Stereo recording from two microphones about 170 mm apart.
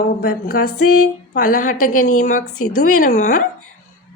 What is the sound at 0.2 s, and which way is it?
A woman's voice, 60° left (ahead or behind).